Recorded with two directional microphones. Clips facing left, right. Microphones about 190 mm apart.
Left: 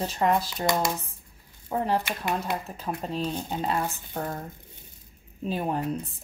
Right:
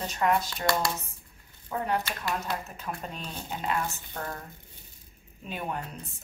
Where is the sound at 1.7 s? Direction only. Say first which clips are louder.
Left 3 dB; 20° left (ahead or behind).